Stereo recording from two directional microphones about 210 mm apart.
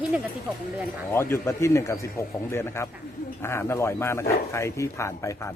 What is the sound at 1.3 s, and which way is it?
Speech, 15° left (ahead or behind).